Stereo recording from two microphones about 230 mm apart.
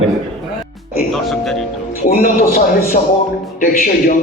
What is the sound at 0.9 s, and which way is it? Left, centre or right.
Speech, centre.